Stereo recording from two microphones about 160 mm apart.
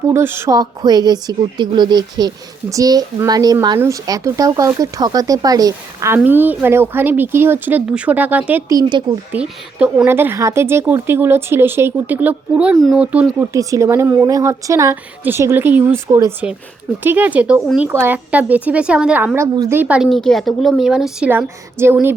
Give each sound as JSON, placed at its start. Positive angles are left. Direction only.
{"t": 0.1, "sound": "a woman's voice", "side_deg": -15}
{"t": 8.7, "sound": "speech", "side_deg": -25}
{"t": 9.3, "sound": "a woman's voice", "side_deg": -10}
{"t": 13.5, "sound": "a woman's voice", "side_deg": -20}
{"t": 20.1, "sound": "a woman's voice", "side_deg": 0}